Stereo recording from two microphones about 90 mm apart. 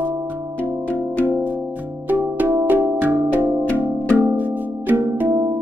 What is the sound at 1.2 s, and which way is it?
Music, 20° right (ahead or behind).